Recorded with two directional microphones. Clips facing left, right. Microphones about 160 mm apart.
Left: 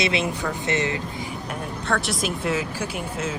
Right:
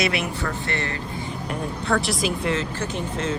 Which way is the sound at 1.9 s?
Centre (ahead or behind).